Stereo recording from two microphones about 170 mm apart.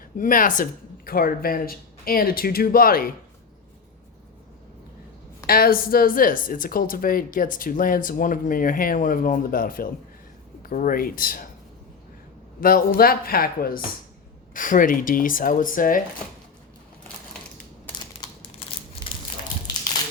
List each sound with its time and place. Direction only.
0.2 s a woman's voice: 50° left (ahead or behind)
5.5 s a woman's voice: 60° left (ahead or behind)
12.5 s a woman's voice: 55° left (ahead or behind)